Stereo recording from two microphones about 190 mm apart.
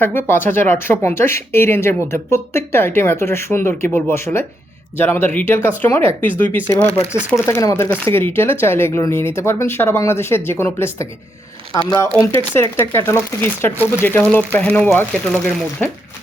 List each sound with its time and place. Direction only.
0.0 s speech: 10° left (ahead or behind)